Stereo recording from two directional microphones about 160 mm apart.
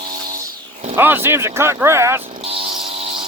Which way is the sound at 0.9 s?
15° right (ahead or behind).